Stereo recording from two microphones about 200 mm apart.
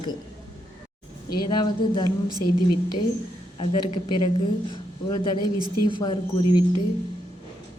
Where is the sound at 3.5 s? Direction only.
25° left (ahead or behind).